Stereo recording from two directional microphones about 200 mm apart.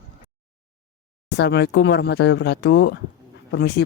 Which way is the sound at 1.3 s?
55° left (ahead or behind).